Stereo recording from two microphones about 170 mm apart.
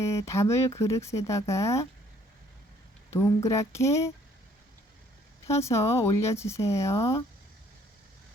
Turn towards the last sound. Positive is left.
turn(degrees=20)  # may be behind; listen again after turning